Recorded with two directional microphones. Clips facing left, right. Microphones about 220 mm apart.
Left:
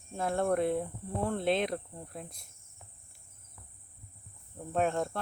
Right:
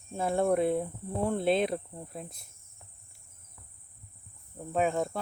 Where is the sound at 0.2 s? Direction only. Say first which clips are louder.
Right 3 dB; 5° right (ahead or behind).